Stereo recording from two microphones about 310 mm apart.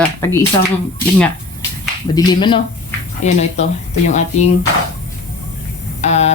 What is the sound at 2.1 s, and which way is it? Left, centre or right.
Speech, centre.